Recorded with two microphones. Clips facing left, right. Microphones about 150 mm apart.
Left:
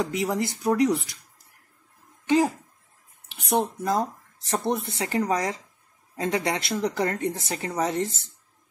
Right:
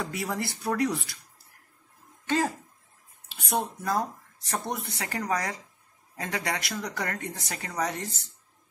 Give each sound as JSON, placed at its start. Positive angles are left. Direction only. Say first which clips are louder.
{"t": 0.0, "sound": "speech", "louder": "left 6 dB", "side_deg": 15}
{"t": 2.2, "sound": "speech", "louder": "left 6 dB", "side_deg": 15}